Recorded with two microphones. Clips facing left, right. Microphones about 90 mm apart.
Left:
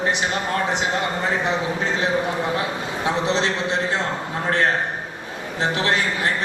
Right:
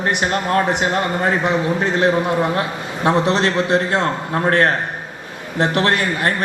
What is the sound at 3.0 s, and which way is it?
A man's voice, 60° right (ahead or behind).